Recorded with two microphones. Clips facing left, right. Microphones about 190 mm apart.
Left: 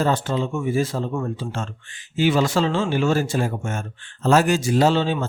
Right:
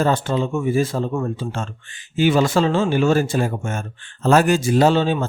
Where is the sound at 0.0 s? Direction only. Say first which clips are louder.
Right 2 dB; 55° right (ahead or behind).